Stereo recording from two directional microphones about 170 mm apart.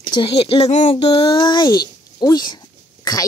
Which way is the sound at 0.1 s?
30° left (ahead or behind).